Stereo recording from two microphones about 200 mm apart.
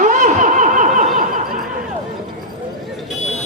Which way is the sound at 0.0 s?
35° right (ahead or behind).